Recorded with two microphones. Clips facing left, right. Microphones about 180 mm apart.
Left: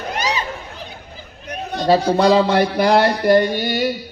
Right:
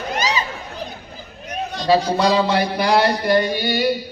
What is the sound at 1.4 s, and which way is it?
A man's voice, 55° left (ahead or behind).